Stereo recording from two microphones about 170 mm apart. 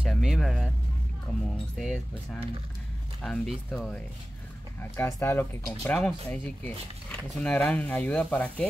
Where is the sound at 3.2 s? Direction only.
5° left (ahead or behind).